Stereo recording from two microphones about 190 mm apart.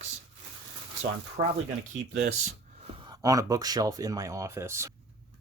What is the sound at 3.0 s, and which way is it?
Speech, 20° right (ahead or behind).